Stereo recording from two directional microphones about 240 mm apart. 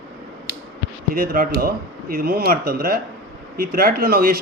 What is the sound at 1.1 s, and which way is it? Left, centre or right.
Speech, right.